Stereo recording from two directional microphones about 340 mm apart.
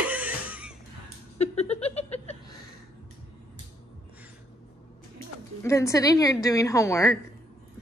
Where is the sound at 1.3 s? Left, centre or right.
Centre.